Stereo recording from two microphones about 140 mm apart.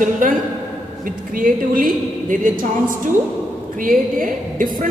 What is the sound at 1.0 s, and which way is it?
A woman's voice, 85° right.